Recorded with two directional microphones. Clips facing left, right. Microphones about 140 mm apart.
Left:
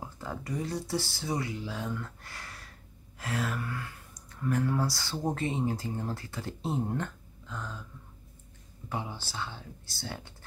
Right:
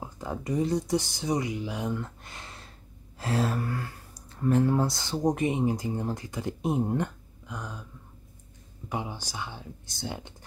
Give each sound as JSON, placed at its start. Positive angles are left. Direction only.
{"t": 0.0, "sound": "speech", "side_deg": -15}
{"t": 8.8, "sound": "speech", "side_deg": -15}